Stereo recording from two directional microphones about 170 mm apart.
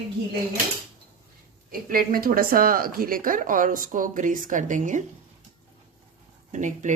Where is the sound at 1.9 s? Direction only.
60° right (ahead or behind).